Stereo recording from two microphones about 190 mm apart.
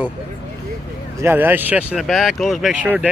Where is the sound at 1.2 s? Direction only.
10° right (ahead or behind).